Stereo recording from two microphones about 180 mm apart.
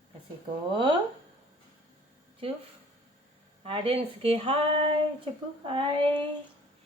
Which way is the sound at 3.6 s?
30° right (ahead or behind).